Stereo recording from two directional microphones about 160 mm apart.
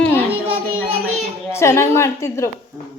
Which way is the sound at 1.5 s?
15° left (ahead or behind).